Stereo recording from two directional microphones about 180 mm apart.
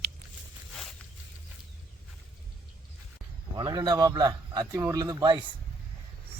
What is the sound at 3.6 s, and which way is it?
A man's voice, 20° right (ahead or behind).